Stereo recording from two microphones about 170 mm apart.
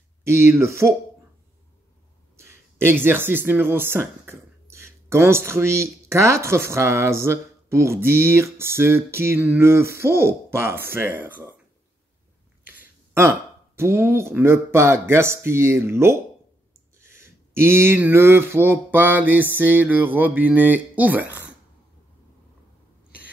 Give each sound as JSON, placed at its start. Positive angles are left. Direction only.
{"t": 0.2, "sound": "speech", "side_deg": -15}
{"t": 2.3, "sound": "speech", "side_deg": -15}
{"t": 12.6, "sound": "a sound", "side_deg": -15}
{"t": 13.7, "sound": "speech", "side_deg": -15}